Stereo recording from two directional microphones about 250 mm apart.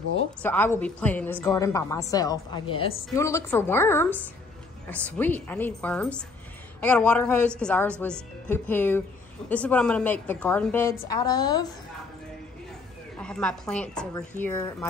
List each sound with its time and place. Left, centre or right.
0.4 s a woman's voice: centre
13.2 s a woman's voice: centre